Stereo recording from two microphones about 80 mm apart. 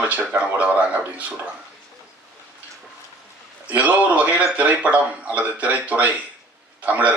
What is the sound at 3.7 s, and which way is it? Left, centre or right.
A man's voice, centre.